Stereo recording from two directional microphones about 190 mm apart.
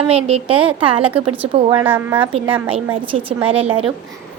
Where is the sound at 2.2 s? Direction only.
25° right (ahead or behind).